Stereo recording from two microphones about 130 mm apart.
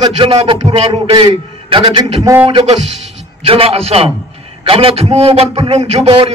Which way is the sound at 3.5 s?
45° right (ahead or behind).